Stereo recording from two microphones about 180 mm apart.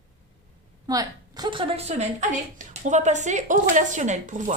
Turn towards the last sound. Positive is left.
turn(degrees=-45)  # may be behind; listen again after turning